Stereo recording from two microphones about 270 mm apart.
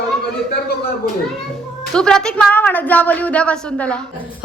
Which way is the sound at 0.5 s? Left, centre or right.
Left.